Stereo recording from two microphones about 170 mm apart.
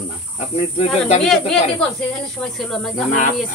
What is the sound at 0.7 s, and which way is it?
Speech, 40° left (ahead or behind).